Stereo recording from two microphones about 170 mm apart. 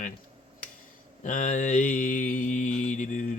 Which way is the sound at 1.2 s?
45° left (ahead or behind).